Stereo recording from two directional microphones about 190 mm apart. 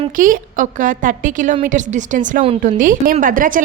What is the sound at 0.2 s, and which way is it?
A woman's voice, 45° right (ahead or behind).